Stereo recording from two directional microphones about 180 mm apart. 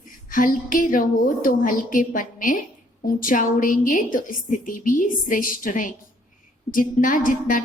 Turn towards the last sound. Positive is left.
turn(degrees=50)  # may be behind; listen again after turning